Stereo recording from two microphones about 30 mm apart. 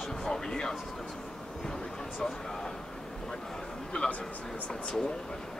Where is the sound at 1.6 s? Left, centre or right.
Left.